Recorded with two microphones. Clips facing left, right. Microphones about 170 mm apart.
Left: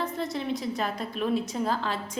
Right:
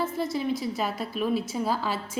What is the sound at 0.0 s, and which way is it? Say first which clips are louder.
A woman's voice: right 3 dB; 5° right (ahead or behind).